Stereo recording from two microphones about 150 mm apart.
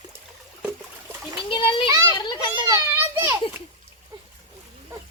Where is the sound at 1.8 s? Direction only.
20° right (ahead or behind).